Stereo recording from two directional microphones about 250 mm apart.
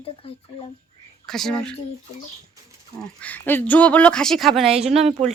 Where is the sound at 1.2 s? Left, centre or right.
Centre.